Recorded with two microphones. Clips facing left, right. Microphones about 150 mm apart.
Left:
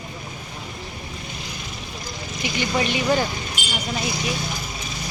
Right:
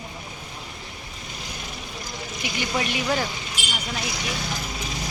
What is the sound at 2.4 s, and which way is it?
Speech, centre (ahead or behind).